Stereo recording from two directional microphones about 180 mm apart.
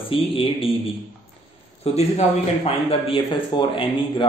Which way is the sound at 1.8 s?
35° left (ahead or behind).